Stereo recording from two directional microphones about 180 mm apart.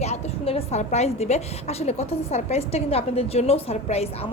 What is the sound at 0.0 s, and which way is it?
A woman's voice, 35° left (ahead or behind).